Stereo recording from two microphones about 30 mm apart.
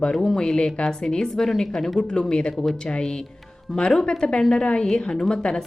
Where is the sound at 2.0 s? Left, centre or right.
Left.